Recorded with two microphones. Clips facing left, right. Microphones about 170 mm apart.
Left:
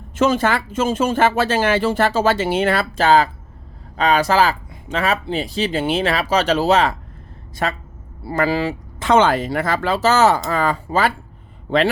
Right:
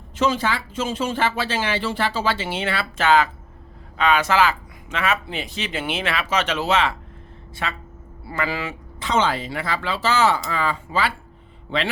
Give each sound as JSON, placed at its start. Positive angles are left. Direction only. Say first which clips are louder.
{"t": 0.2, "sound": "speech", "louder": "left 5 dB", "side_deg": 50}
{"t": 9.0, "sound": "speech", "louder": "left 7 dB", "side_deg": 55}